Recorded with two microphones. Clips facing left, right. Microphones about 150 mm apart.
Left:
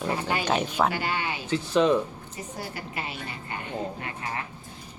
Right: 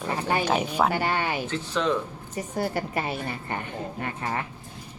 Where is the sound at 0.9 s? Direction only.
45° right (ahead or behind).